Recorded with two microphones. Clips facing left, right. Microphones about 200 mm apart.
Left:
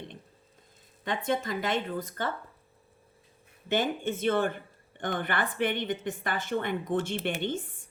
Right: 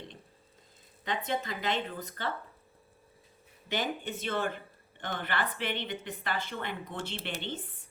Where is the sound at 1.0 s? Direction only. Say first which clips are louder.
Left 4 dB; 50° left (ahead or behind).